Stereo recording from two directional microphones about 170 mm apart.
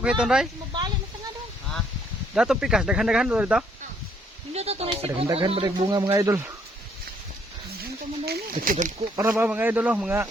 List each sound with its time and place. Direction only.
0.0 s speech: 5° right (ahead or behind)
2.3 s speech: 5° right (ahead or behind)
4.5 s speech: 35° right (ahead or behind); by 6.4 s 20° right (ahead or behind)
7.8 s speech: 65° right (ahead or behind); by 9.0 s 50° right (ahead or behind)
9.1 s speech: 15° right (ahead or behind)